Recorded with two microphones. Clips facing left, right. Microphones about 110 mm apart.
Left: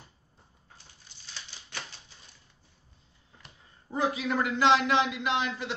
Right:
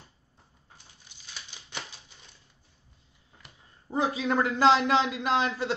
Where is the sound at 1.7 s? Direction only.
15° right (ahead or behind).